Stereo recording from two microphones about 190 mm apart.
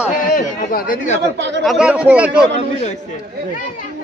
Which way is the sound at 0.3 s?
50° left (ahead or behind).